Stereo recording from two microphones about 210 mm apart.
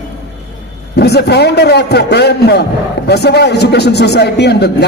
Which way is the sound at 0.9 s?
50° left (ahead or behind).